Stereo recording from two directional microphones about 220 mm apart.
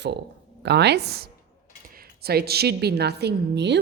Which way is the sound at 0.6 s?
50° right (ahead or behind).